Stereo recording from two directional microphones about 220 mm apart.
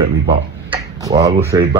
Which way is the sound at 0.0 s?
25° right (ahead or behind).